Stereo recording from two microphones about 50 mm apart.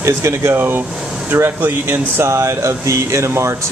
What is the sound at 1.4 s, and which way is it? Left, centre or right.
Speech, right.